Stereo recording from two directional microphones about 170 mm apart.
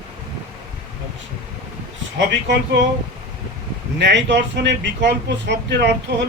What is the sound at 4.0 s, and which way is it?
Speech, 90° right.